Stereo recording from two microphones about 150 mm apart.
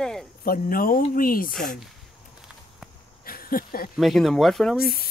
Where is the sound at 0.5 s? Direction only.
70° left (ahead or behind).